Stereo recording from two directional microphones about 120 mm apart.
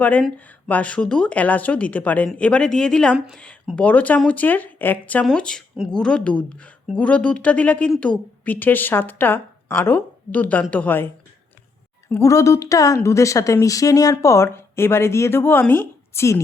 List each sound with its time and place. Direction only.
0.0 s a woman's voice: 15° left (ahead or behind)